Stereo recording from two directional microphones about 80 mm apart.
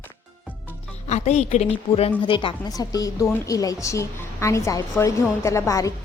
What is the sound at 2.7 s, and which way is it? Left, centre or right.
A woman's voice, left.